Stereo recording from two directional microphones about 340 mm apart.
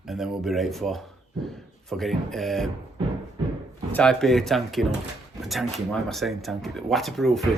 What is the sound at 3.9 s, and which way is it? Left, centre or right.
Speech, centre.